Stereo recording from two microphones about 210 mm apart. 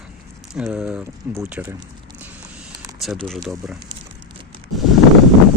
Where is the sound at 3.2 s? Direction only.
Centre (ahead or behind).